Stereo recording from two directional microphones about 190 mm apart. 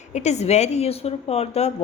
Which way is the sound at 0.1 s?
35° left (ahead or behind).